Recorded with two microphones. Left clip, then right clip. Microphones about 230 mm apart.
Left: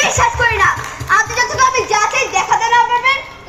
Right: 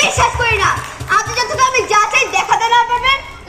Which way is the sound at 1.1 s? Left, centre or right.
Right.